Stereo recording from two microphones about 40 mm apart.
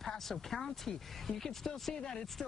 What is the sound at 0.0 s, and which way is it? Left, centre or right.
Speech, centre.